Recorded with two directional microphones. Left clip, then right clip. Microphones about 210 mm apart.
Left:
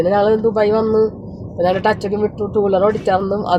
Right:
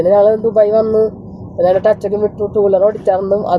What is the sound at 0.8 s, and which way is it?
Speech, 45° left (ahead or behind).